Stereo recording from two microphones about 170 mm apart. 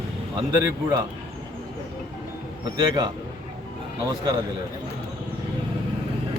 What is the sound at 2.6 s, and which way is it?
Speech, 25° right (ahead or behind).